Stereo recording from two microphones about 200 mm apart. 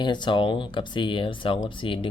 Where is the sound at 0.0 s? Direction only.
20° left (ahead or behind).